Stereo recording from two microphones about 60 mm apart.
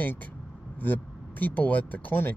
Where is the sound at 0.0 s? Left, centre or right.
Left.